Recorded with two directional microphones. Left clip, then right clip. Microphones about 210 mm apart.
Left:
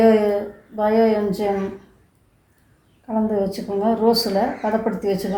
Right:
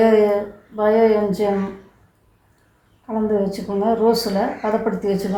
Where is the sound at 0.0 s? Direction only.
30° left (ahead or behind).